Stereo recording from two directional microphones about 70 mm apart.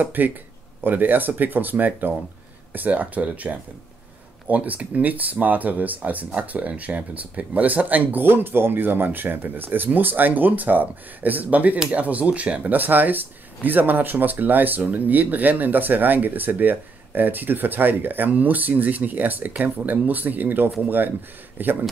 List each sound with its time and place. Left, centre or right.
0.0 s speech: right